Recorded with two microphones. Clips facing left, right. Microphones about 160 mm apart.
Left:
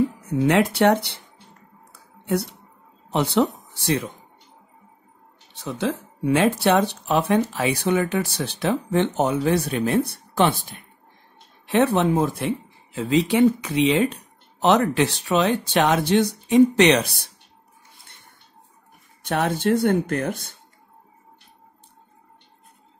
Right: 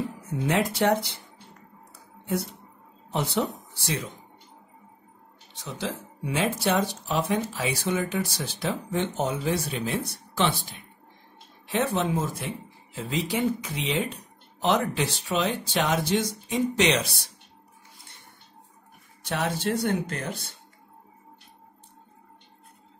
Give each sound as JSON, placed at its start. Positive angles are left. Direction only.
{"t": 0.5, "sound": "speech", "side_deg": 70}
{"t": 3.1, "sound": "speech", "side_deg": 70}
{"t": 5.5, "sound": "speech", "side_deg": 60}
{"t": 11.7, "sound": "speech", "side_deg": 65}
{"t": 19.2, "sound": "speech", "side_deg": 55}